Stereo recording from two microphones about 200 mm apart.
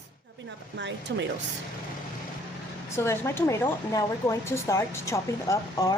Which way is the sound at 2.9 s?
15° left (ahead or behind).